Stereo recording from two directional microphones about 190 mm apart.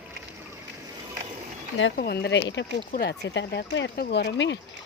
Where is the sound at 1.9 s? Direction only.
55° left (ahead or behind).